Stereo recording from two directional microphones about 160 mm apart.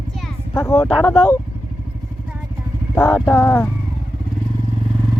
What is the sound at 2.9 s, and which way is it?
Speech, 15° left (ahead or behind).